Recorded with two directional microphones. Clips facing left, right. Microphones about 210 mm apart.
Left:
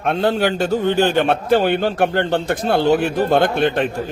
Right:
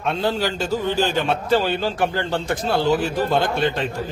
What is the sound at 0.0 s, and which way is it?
A man's voice, 60° left (ahead or behind).